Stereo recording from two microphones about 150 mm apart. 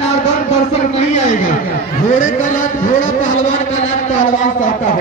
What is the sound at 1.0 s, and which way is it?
A man's voice, 50° left (ahead or behind).